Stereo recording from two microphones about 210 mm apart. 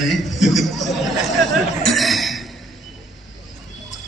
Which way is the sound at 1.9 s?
Centre (ahead or behind).